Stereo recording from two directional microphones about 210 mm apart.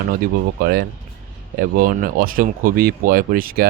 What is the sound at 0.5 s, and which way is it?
Speech, 45° right (ahead or behind).